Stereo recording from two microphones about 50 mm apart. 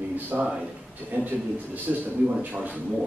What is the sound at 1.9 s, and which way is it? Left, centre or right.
Speech, right.